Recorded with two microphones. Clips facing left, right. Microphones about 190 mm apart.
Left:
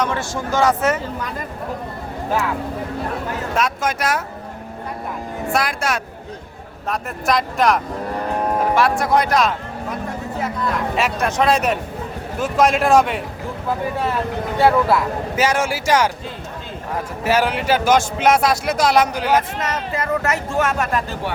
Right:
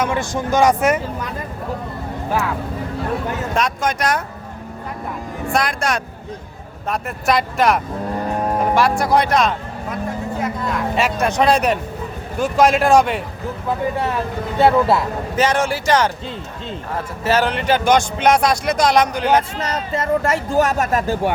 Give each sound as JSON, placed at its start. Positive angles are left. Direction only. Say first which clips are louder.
{"t": 0.0, "sound": "speech", "louder": "right 2 dB", "side_deg": -15}
{"t": 3.5, "sound": "speech", "louder": "even", "side_deg": 5}
{"t": 5.5, "sound": "speech", "louder": "right 1 dB", "side_deg": 5}
{"t": 10.9, "sound": "speech", "louder": "right 4 dB", "side_deg": 0}
{"t": 14.6, "sound": "speech", "louder": "right 1 dB", "side_deg": -25}
{"t": 15.4, "sound": "speech", "louder": "right 2 dB", "side_deg": 10}
{"t": 17.2, "sound": "speech", "louder": "right 1 dB", "side_deg": 10}
{"t": 19.5, "sound": "speech", "louder": "right 1 dB", "side_deg": -30}